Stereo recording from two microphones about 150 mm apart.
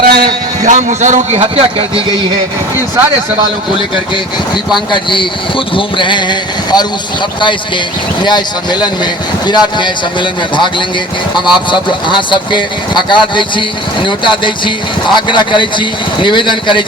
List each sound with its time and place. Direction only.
0.0 s a man's voice: 90° right; by 2.0 s 40° right (ahead or behind)
3.8 s speech: 30° left (ahead or behind)